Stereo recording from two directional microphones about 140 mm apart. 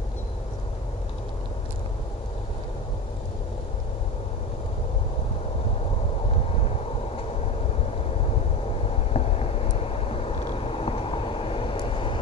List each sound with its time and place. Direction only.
9.1 s vehicle: 45° left (ahead or behind)